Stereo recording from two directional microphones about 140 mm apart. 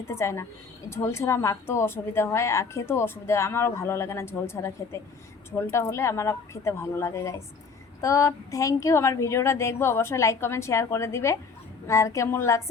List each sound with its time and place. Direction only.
0.1 s a woman's voice: 20° left (ahead or behind)